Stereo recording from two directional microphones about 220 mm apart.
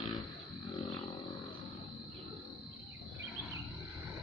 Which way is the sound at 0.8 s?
25° left (ahead or behind).